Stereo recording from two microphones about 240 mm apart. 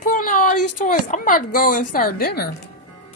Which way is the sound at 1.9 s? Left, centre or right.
Left.